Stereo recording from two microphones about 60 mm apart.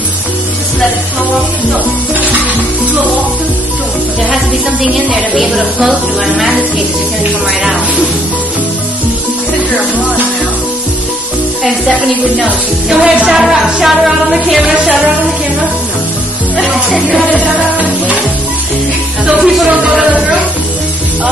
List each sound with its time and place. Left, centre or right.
4.9 s music: centre
11.6 s music: centre
12.9 s music: centre
16.9 s music: centre
17.7 s music: right
19.3 s music: centre